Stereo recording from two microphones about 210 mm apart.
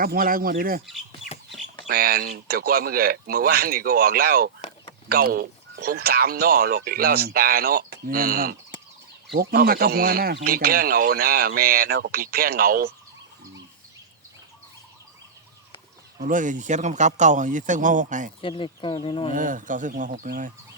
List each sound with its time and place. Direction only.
0.0 s speech: 45° right (ahead or behind)
1.2 s chicken: 65° left (ahead or behind)
1.9 s speech: 45° right (ahead or behind)
16.2 s speech: 35° right (ahead or behind)
18.4 s speech: 25° left (ahead or behind)
19.3 s speech: 40° right (ahead or behind)